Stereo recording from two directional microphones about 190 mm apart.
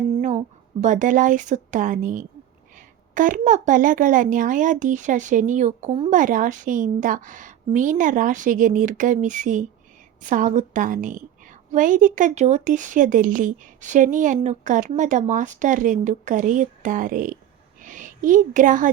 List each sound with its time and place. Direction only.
0.8 s a child's voice: 40° right (ahead or behind)